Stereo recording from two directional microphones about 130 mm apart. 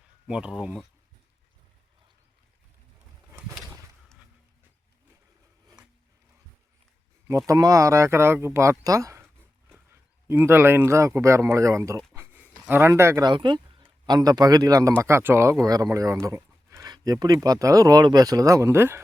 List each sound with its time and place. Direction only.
0.3 s speech: 5° right (ahead or behind)
7.3 s speech: 25° right (ahead or behind)
12.1 s a sound: 15° right (ahead or behind)
12.6 s speech: 20° right (ahead or behind)
13.2 s speech: 35° right (ahead or behind); by 19.0 s 20° right (ahead or behind)